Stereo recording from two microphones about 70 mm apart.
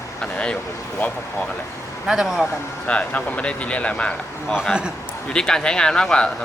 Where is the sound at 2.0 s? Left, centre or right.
Centre.